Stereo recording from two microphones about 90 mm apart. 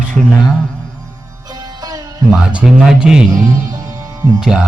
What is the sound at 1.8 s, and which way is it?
Music, 45° right (ahead or behind).